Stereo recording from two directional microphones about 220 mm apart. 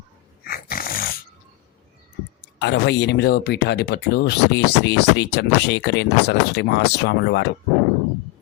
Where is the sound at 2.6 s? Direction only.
50° left (ahead or behind).